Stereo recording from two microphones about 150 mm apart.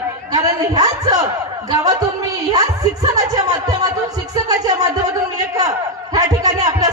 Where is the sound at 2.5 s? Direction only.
25° right (ahead or behind).